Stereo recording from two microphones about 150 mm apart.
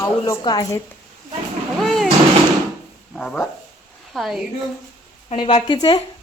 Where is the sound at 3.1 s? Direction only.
5° left (ahead or behind).